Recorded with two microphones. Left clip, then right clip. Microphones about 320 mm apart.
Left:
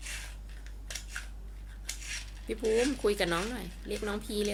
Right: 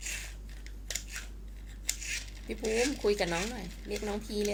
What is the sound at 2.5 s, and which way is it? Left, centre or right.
Speech, left.